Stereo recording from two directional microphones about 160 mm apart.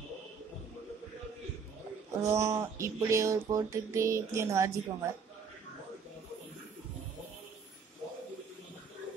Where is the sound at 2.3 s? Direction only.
20° right (ahead or behind).